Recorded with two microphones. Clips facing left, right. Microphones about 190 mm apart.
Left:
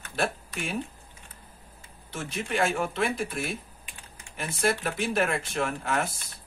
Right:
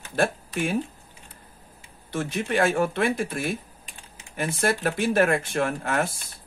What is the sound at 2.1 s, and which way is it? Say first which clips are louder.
Speech: right 5 dB; 50° right (ahead or behind).